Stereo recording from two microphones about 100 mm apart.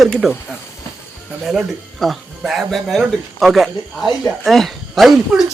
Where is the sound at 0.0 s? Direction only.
Centre (ahead or behind).